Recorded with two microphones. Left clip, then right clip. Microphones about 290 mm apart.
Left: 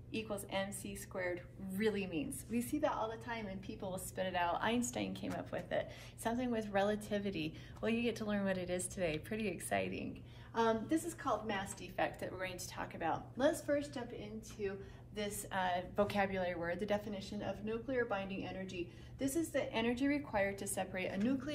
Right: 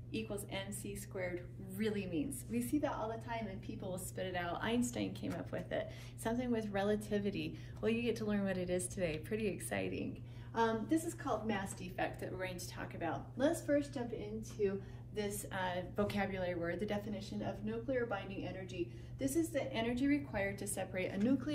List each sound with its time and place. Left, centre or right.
0.1 s a woman's voice: centre